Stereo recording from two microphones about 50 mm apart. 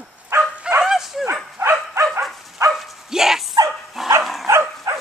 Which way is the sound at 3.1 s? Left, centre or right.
Centre.